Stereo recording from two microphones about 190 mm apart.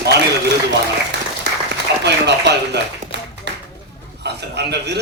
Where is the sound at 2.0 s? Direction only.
65° right (ahead or behind).